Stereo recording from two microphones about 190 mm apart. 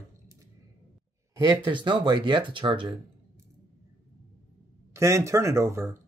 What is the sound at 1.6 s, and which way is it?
Speech, 25° right (ahead or behind).